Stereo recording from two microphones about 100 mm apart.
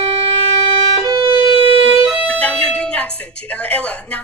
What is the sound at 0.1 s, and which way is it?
Music, 65° right (ahead or behind).